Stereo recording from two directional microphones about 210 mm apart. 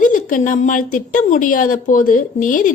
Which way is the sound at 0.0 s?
40° left (ahead or behind).